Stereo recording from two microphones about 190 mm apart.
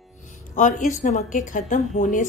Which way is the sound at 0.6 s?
40° left (ahead or behind).